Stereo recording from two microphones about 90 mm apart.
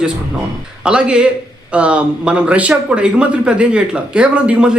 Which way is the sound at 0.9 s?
10° right (ahead or behind).